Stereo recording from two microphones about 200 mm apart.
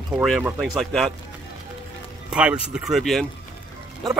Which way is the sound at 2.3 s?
5° right (ahead or behind).